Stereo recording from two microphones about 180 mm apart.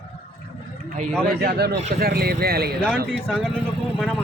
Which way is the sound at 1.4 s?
60° right (ahead or behind).